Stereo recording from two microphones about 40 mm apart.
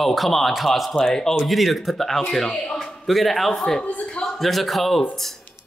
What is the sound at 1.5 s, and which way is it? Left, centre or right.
A woman's voice, centre.